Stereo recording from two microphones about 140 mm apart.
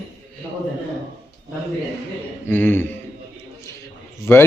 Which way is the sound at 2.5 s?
15° left (ahead or behind).